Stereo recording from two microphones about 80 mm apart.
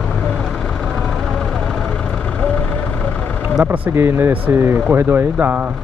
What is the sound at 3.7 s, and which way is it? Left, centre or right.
Speech, right.